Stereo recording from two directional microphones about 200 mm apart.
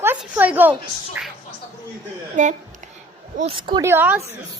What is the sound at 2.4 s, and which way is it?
Speech, 40° right (ahead or behind).